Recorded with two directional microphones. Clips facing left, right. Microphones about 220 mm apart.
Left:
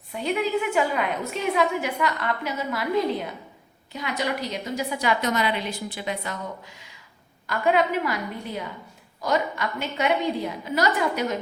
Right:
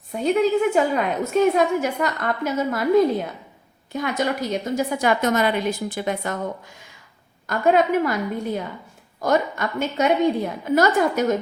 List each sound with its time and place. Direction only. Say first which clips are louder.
0.1 s a woman's voice: right 6 dB; 40° right (ahead or behind)